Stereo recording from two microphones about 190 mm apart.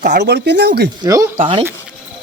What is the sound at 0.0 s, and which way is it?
Speech, 60° right (ahead or behind).